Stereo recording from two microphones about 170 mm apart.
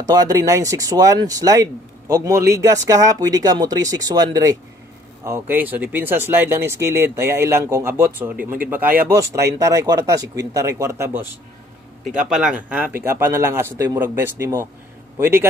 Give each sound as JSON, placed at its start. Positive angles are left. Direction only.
{"t": 0.0, "sound": "speech", "side_deg": -20}
{"t": 8.4, "sound": "speech", "side_deg": -55}
{"t": 8.6, "sound": "speech", "side_deg": -10}
{"t": 12.3, "sound": "speech", "side_deg": -5}